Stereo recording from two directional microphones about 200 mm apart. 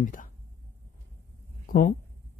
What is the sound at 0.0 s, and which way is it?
Speech, 40° left (ahead or behind).